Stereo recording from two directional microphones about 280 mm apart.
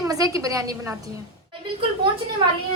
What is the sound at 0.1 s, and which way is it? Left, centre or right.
Speech, centre.